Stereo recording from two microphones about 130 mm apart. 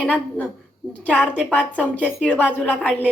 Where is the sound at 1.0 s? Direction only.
10° left (ahead or behind).